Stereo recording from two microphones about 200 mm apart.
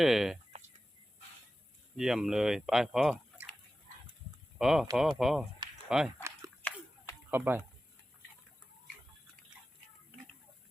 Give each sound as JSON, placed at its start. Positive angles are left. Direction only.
{"t": 0.0, "sound": "speech", "side_deg": 0}
{"t": 0.5, "sound": "a sound", "side_deg": -35}
{"t": 2.0, "sound": "speech", "side_deg": 0}
{"t": 4.5, "sound": "speech", "side_deg": 0}
{"t": 6.6, "sound": "a sound", "side_deg": 10}
{"t": 7.3, "sound": "speech", "side_deg": -10}